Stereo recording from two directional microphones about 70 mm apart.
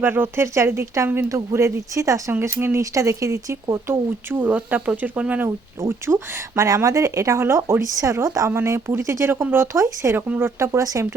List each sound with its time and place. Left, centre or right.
0.0 s speech: right
2.8 s speech: right
5.8 s speech: right
6.7 s speech: right
10.2 s speech: right
10.6 s speech: right